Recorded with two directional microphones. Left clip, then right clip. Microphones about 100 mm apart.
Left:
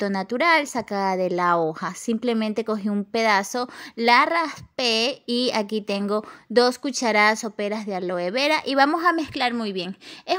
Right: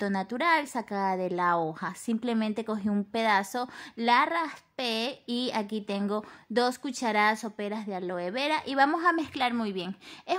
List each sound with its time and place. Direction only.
0.0 s a woman's voice: 15° left (ahead or behind)